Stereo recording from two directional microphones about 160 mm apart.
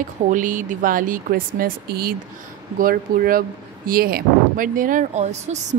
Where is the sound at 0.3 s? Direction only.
55° right (ahead or behind).